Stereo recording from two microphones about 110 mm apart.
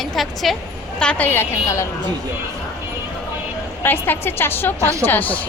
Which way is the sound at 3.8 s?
20° left (ahead or behind).